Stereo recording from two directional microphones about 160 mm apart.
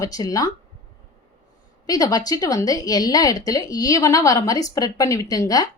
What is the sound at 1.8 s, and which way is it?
A woman's voice, 20° left (ahead or behind).